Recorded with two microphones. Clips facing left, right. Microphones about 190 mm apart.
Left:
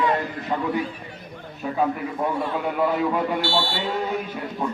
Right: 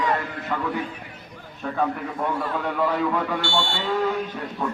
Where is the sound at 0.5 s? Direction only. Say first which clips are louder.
Left 2 dB; 20° left (ahead or behind).